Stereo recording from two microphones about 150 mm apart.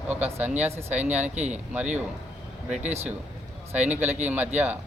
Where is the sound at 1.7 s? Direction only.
10° right (ahead or behind).